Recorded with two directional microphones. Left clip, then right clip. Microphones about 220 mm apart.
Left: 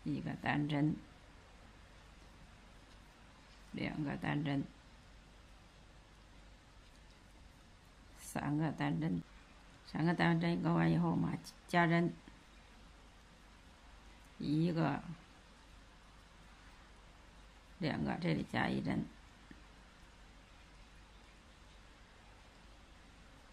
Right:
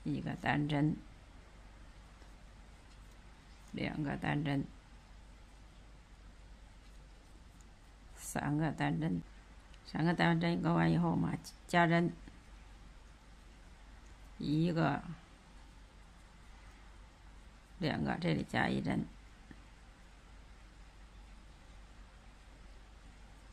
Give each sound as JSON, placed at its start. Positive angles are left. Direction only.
{"t": 0.1, "sound": "speech", "side_deg": -20}
{"t": 3.7, "sound": "speech", "side_deg": -20}
{"t": 8.3, "sound": "speech", "side_deg": -20}
{"t": 14.4, "sound": "speech", "side_deg": -20}
{"t": 17.7, "sound": "speech", "side_deg": -20}